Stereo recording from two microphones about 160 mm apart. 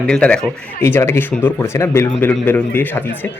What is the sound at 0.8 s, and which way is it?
Speech, 15° left (ahead or behind).